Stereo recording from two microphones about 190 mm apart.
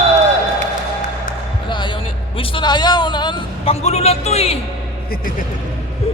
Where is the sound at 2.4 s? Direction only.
25° left (ahead or behind).